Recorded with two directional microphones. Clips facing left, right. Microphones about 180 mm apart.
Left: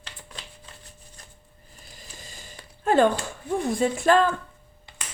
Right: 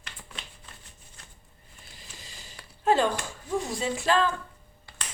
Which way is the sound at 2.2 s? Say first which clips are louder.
Left 4 dB; 50° left (ahead or behind).